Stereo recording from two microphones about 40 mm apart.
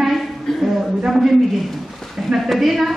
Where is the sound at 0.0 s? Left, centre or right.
Centre.